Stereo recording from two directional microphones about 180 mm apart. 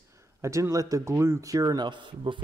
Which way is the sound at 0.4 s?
15° right (ahead or behind).